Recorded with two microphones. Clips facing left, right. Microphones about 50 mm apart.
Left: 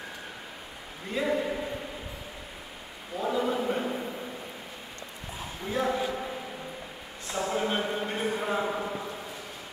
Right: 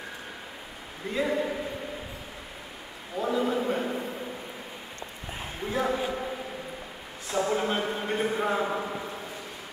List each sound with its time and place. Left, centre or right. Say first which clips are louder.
1.1 s a man's voice: even; centre
3.2 s a sound: right 1 dB; centre
5.7 s a man's voice: even; centre
7.3 s a man's voice: right 2 dB; centre